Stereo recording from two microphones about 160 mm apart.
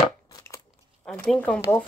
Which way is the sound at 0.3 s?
20° left (ahead or behind).